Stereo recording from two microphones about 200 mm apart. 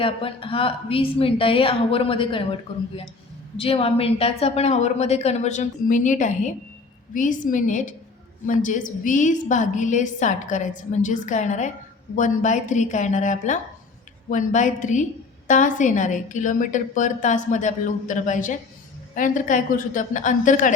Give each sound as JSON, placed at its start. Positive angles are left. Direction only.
{"t": 0.0, "sound": "a woman's voice", "side_deg": 25}